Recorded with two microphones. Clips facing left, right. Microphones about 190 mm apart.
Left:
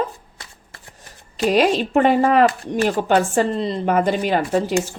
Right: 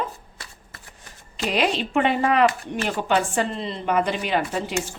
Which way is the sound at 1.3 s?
45° left (ahead or behind).